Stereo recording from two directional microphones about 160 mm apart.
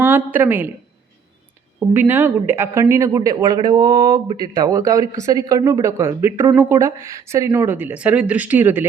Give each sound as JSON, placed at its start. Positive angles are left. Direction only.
{"t": 0.0, "sound": "a woman's voice", "side_deg": -10}
{"t": 1.9, "sound": "speech", "side_deg": -15}